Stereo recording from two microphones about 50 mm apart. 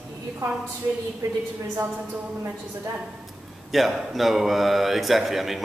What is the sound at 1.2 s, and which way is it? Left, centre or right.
Speech, right.